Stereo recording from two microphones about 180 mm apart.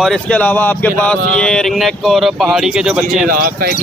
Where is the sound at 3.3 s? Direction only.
55° right (ahead or behind).